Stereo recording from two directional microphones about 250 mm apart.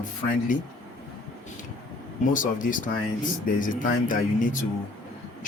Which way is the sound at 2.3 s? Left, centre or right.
Left.